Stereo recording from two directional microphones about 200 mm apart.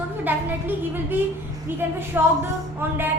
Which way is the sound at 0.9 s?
10° right (ahead or behind).